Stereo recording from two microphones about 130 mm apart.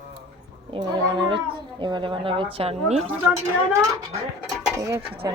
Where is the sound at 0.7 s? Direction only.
40° right (ahead or behind).